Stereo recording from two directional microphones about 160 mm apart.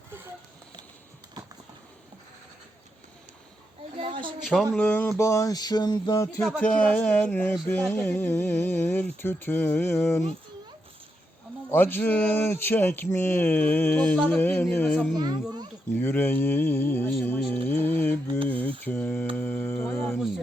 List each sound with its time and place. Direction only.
3.9 s a sound: 35° right (ahead or behind)
4.4 s speech: centre (ahead or behind)
4.9 s mantra: 10° left (ahead or behind)
6.6 s speech: 5° left (ahead or behind)
11.7 s speech: 15° left (ahead or behind)
15.1 s speech: 25° right (ahead or behind)
15.9 s speech: 15° left (ahead or behind)